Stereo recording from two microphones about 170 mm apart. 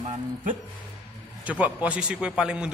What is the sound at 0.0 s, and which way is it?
Music, 40° right (ahead or behind).